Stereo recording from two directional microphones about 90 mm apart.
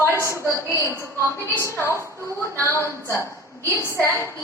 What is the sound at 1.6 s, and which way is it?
Speech, 30° left (ahead or behind).